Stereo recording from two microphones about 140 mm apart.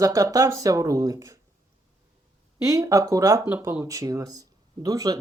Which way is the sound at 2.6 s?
25° right (ahead or behind).